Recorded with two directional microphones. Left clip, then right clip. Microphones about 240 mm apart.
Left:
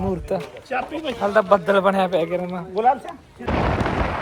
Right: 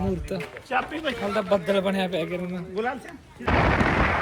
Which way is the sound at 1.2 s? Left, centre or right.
Left.